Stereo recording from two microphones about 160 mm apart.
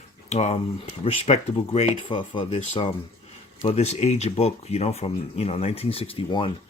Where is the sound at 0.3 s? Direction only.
40° left (ahead or behind).